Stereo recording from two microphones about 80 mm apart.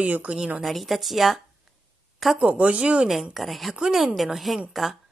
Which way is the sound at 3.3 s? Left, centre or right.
Centre.